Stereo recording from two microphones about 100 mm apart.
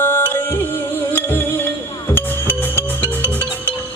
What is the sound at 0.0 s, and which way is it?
Music, 20° left (ahead or behind).